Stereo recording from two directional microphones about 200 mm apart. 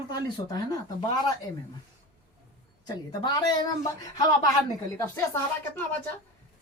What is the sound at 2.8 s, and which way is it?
Speech, 20° left (ahead or behind).